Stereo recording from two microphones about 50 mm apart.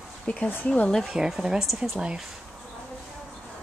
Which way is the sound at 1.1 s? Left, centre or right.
Centre.